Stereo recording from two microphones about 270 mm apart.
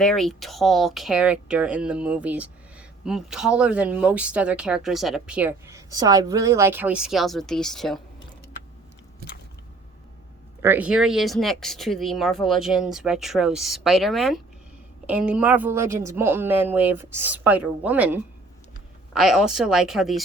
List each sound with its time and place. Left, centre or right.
0.0 s speech: centre
10.6 s a woman's voice: centre